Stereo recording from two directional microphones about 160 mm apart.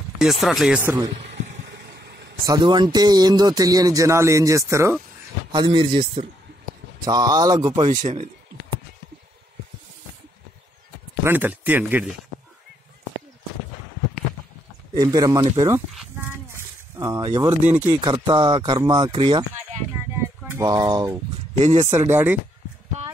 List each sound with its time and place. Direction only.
0.2 s speech: centre (ahead or behind)
1.7 s vehicle: 90° right
2.4 s speech: 25° right (ahead or behind)
5.5 s speech: 30° right (ahead or behind)
11.2 s speech: 10° right (ahead or behind)
15.0 s speech: 25° right (ahead or behind)
16.2 s a sound: 15° right (ahead or behind)
17.8 s speech: 25° right (ahead or behind)
20.2 s a sound: 20° right (ahead or behind)
21.5 s speech: 40° right (ahead or behind)
21.9 s speech: 15° right (ahead or behind)